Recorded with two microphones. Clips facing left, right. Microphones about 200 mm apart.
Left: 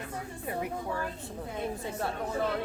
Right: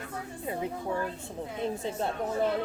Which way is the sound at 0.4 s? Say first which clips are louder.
Right 2 dB; 20° right (ahead or behind).